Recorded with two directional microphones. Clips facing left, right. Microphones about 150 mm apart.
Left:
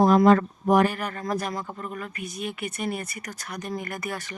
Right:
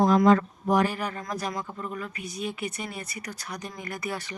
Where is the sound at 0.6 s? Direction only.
55° left (ahead or behind).